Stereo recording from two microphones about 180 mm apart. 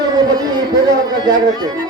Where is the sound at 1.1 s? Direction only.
20° right (ahead or behind).